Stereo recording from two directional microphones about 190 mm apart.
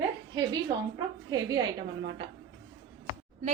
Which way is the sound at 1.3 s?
20° right (ahead or behind).